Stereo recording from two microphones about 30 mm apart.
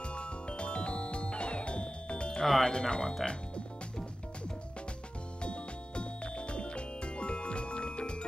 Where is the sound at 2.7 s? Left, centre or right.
Left.